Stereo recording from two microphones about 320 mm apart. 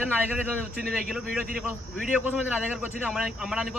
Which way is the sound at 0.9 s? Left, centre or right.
Centre.